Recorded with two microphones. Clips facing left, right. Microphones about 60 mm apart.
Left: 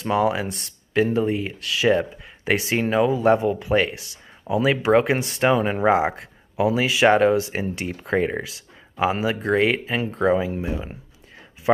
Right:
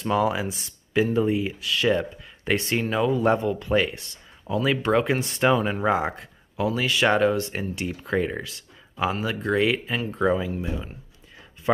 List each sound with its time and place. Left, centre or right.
0.0 s speech: centre
5.6 s speech: centre
10.3 s speech: centre